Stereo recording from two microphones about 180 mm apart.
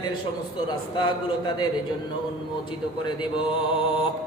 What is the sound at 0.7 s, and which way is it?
Speech, 25° left (ahead or behind).